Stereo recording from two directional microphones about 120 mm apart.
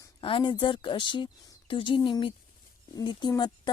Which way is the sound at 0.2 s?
45° left (ahead or behind).